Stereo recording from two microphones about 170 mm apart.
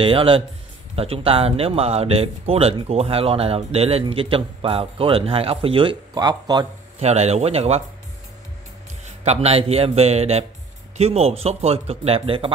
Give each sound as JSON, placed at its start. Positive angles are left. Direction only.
{"t": 0.0, "sound": "speech", "side_deg": -30}
{"t": 7.0, "sound": "speech", "side_deg": -40}
{"t": 9.2, "sound": "speech", "side_deg": -40}